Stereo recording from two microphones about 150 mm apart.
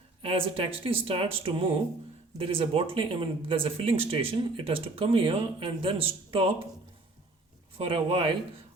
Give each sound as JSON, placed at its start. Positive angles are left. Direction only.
{"t": 0.2, "sound": "speech", "side_deg": -35}
{"t": 7.8, "sound": "speech", "side_deg": -35}